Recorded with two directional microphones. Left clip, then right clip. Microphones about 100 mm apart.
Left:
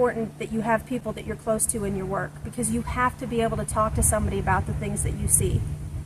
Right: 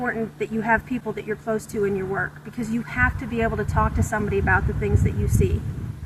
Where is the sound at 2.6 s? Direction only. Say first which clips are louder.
Right 2 dB; 35° left (ahead or behind).